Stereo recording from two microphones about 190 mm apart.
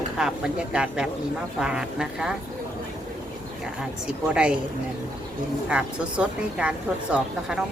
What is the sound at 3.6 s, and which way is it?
Speech, 5° right (ahead or behind).